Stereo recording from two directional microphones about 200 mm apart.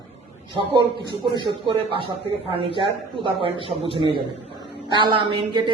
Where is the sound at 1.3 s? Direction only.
25° right (ahead or behind).